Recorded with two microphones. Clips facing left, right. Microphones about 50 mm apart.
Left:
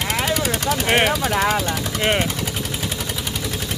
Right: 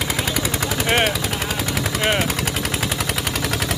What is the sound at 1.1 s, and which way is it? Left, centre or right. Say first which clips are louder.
Machine gun: left 5 dB; left.